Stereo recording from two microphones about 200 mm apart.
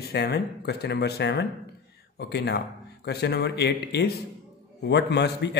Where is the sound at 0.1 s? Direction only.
55° left (ahead or behind).